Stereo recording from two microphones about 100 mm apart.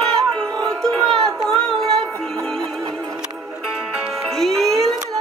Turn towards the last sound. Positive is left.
turn(degrees=5)  # may be behind; listen again after turning